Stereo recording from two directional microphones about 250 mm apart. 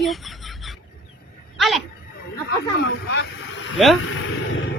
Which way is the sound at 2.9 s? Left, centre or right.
Left.